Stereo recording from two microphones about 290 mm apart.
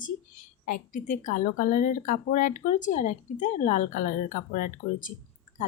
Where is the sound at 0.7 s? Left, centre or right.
Left.